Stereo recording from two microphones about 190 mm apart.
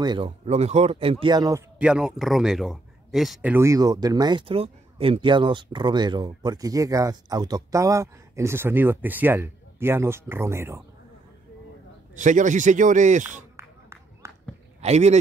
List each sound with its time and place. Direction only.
0.0 s speech: 25° right (ahead or behind)
0.5 s speech: 35° right (ahead or behind)
1.8 s speech: 5° right (ahead or behind)
3.5 s speech: 15° right (ahead or behind)
12.2 s speech: 40° right (ahead or behind)
13.6 s a sound: 15° right (ahead or behind)
14.8 s speech: 35° right (ahead or behind)